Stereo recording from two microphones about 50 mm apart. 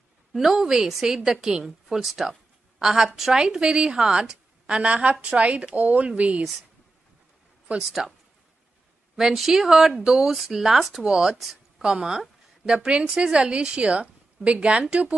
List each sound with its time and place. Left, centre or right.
0.3 s a woman's voice: centre; by 6.4 s right
8.0 s speech: centre
11.1 s a woman's voice: centre